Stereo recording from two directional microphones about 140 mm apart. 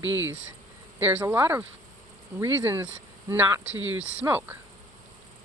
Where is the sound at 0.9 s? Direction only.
15° right (ahead or behind).